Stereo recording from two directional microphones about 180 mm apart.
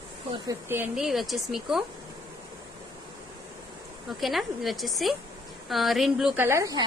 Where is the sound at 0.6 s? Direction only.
10° right (ahead or behind).